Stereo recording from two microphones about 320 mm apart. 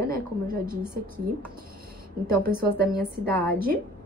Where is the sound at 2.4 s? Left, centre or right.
Right.